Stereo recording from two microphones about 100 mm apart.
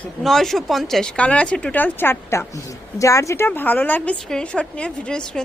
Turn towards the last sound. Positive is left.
turn(degrees=10)  # may be behind; listen again after turning